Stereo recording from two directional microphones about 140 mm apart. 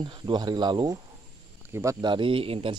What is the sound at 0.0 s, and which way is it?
Speech, 35° right (ahead or behind).